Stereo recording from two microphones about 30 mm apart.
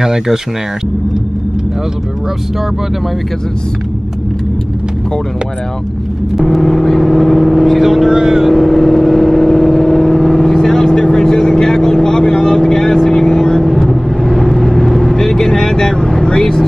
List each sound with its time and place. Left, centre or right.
0.0 s speech: centre
6.4 s vehicle: centre
7.8 s vehicle: centre
8.1 s vehicle: centre
8.5 s vehicle: centre; by 16.6 s left